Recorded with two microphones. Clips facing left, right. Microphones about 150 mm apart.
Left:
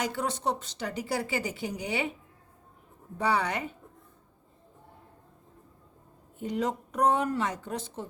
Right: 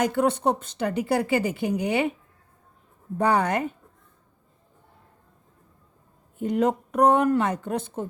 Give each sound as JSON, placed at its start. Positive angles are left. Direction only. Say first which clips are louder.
{"t": 0.0, "sound": "speech", "louder": "right 8 dB", "side_deg": -55}
{"t": 3.2, "sound": "speech", "louder": "right 6 dB", "side_deg": -50}
{"t": 6.4, "sound": "speech", "louder": "right 7 dB", "side_deg": -55}